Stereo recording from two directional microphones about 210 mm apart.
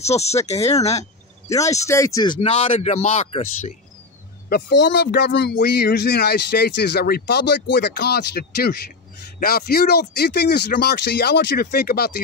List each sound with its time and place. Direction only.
0.0 s speech: 30° left (ahead or behind)
1.5 s speech: 15° left (ahead or behind); by 3.7 s 30° left (ahead or behind)
4.5 s speech: 50° left (ahead or behind)